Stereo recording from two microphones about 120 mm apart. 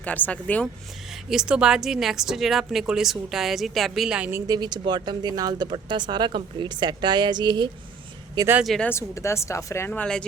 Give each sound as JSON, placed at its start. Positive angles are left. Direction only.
{"t": 0.0, "sound": "a woman's voice", "side_deg": 15}
{"t": 1.1, "sound": "speech", "side_deg": -5}
{"t": 4.3, "sound": "speech", "side_deg": -25}
{"t": 8.6, "sound": "speech", "side_deg": 0}
{"t": 8.9, "sound": "a woman's voice", "side_deg": 25}